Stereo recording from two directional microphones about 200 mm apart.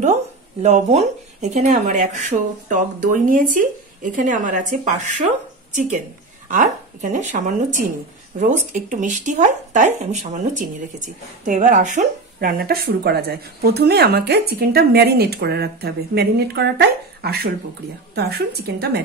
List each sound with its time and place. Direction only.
0.0 s speech: 35° right (ahead or behind)
6.5 s speech: 40° right (ahead or behind)